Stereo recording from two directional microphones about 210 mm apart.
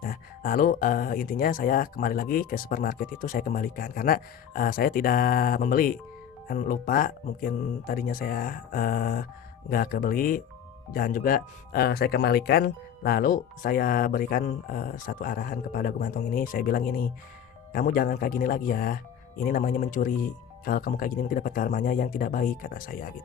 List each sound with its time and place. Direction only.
0.0 s speech: 40° left (ahead or behind)